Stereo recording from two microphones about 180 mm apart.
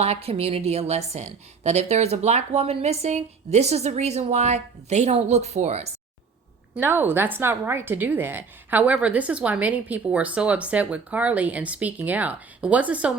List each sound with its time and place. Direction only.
0.0 s a woman's voice: 35° right (ahead or behind)
6.7 s a woman's voice: 10° right (ahead or behind)